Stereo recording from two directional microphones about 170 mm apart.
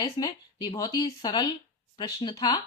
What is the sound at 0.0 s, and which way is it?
A woman's voice, 25° left (ahead or behind).